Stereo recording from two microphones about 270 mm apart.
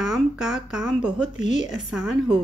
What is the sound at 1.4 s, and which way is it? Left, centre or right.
Speech, left.